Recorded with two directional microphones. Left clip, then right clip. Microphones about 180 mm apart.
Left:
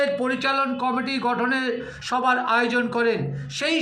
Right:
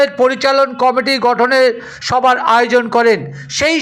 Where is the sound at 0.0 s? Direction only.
40° right (ahead or behind).